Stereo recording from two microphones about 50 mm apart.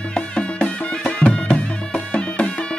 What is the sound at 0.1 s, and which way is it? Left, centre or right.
Music, left.